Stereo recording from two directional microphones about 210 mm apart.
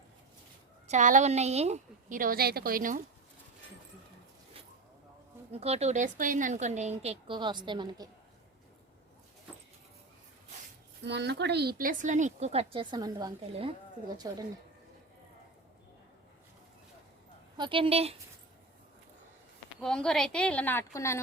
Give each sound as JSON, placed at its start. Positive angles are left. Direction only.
{"t": 0.9, "sound": "a woman's voice", "side_deg": -35}
{"t": 5.5, "sound": "a woman's voice", "side_deg": -30}
{"t": 11.0, "sound": "a woman's voice", "side_deg": -55}
{"t": 17.6, "sound": "a woman's voice", "side_deg": -25}
{"t": 19.8, "sound": "a woman's voice", "side_deg": 5}